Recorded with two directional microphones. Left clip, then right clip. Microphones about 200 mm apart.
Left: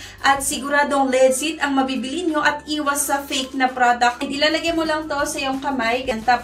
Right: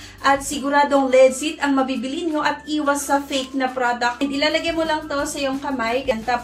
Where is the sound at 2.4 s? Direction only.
10° left (ahead or behind).